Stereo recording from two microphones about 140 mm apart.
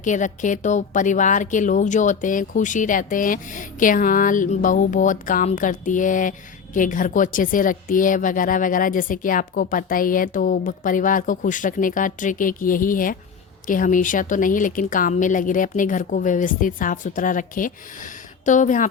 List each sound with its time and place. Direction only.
0.0 s a woman's voice: 65° left (ahead or behind)